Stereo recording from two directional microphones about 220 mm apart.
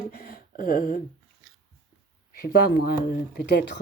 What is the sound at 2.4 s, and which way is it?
Speech, 40° left (ahead or behind).